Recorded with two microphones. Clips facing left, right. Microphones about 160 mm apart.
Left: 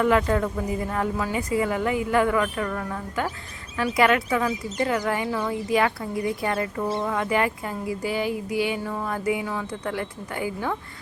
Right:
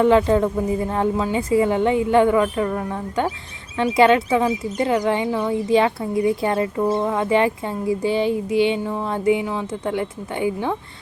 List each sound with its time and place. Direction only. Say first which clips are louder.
0.0 s speech: right 6 dB; 25° right (ahead or behind)